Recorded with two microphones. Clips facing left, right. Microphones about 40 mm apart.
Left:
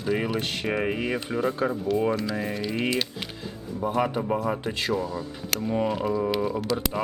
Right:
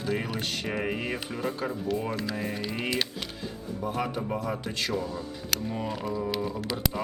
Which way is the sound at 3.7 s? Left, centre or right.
Centre.